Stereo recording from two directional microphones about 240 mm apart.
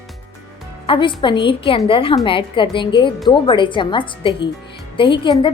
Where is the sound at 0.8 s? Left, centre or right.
Left.